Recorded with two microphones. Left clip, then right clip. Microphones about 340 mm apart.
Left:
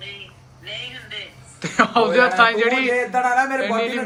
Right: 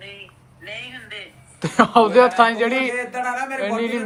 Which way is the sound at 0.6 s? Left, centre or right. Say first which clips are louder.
Left 1 dB; right.